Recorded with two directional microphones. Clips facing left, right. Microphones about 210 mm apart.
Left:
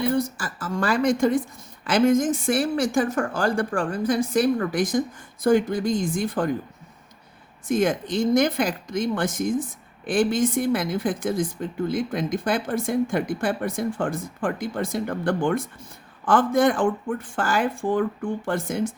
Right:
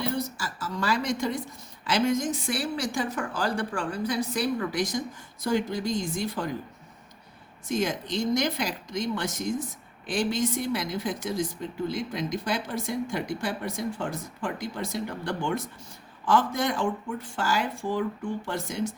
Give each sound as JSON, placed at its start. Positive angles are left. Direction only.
{"t": 0.0, "sound": "speech", "side_deg": 55}
{"t": 7.7, "sound": "speech", "side_deg": 55}